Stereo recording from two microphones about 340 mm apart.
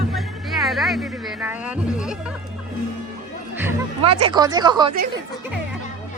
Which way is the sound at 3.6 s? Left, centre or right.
Centre.